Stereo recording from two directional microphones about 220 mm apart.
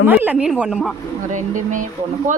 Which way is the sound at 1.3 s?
35° right (ahead or behind).